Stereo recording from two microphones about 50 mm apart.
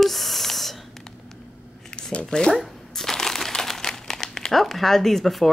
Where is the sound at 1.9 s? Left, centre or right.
Left.